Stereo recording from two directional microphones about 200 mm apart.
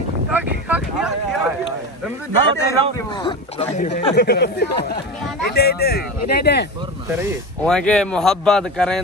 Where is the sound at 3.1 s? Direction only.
25° left (ahead or behind).